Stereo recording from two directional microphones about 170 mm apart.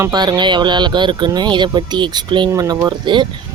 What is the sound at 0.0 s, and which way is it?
A woman's voice, 25° right (ahead or behind).